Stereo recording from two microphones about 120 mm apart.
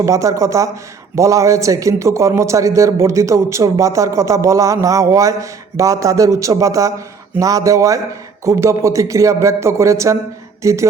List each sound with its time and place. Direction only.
0.0 s a man's voice: 25° right (ahead or behind)